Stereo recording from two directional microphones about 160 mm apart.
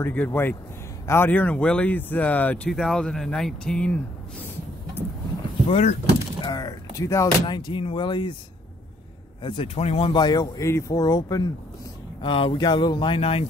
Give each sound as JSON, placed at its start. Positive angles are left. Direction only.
{"t": 0.0, "sound": "speech", "side_deg": 10}
{"t": 5.7, "sound": "speech", "side_deg": 45}
{"t": 6.4, "sound": "speech", "side_deg": 25}
{"t": 9.4, "sound": "speech", "side_deg": 30}